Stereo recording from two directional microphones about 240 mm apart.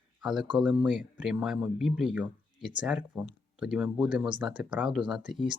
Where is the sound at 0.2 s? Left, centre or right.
Centre.